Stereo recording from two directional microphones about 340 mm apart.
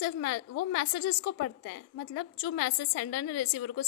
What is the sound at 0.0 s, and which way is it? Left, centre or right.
A woman's voice, left.